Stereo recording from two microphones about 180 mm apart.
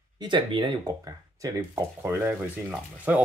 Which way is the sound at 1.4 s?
15° right (ahead or behind).